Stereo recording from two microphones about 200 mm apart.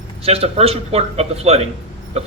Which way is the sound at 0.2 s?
30° right (ahead or behind).